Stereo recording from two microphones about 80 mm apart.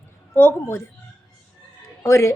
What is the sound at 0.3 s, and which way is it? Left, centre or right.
Speech, left.